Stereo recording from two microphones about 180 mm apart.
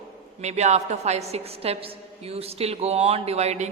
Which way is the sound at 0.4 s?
40° right (ahead or behind).